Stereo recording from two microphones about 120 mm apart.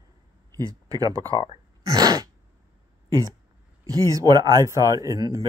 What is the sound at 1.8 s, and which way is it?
Sneeze, 30° right (ahead or behind).